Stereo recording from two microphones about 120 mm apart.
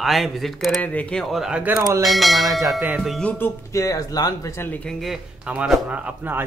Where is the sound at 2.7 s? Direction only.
10° right (ahead or behind).